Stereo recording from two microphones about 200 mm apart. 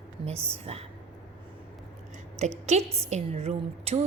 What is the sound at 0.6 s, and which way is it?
Speech, 30° right (ahead or behind).